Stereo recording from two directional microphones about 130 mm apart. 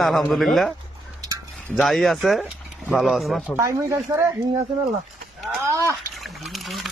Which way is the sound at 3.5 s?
20° right (ahead or behind).